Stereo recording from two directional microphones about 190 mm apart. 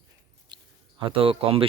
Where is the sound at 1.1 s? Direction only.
30° right (ahead or behind).